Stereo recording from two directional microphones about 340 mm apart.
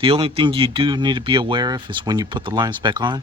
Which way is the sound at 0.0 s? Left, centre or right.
Centre.